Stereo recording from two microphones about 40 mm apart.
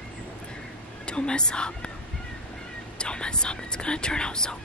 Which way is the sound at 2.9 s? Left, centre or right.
Left.